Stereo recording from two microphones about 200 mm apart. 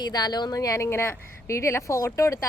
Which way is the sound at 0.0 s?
20° left (ahead or behind).